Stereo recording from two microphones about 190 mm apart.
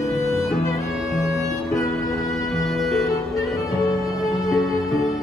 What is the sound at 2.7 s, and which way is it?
Music, centre (ahead or behind).